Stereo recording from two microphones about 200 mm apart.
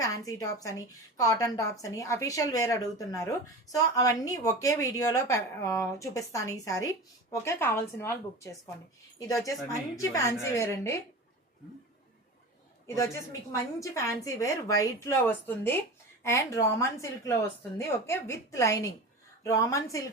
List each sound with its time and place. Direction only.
0.0 s a woman's voice: 15° left (ahead or behind)
13.5 s speech: 15° left (ahead or behind)